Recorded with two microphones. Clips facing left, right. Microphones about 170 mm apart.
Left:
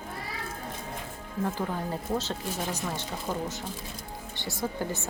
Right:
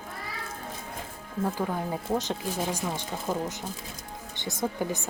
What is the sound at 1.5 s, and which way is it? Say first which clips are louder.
A woman's voice: right 2 dB; 10° right (ahead or behind).